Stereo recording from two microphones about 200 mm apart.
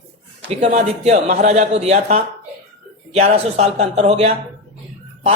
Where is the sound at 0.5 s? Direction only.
35° right (ahead or behind).